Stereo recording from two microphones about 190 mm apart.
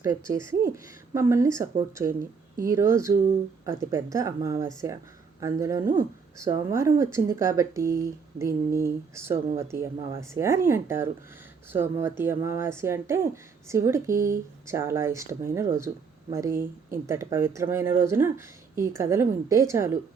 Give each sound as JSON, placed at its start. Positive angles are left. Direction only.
{"t": 0.0, "sound": "speech", "side_deg": -15}
{"t": 2.6, "sound": "speech", "side_deg": -15}